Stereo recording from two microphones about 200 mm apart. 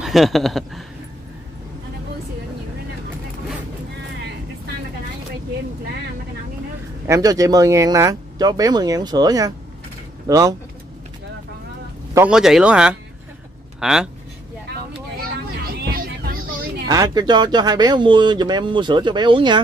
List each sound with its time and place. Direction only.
0.0 s speech: centre (ahead or behind)
7.1 s speech: 15° right (ahead or behind)
12.3 s speech: 5° right (ahead or behind)
14.7 s vehicle: 50° right (ahead or behind)
16.8 s speech: 20° right (ahead or behind)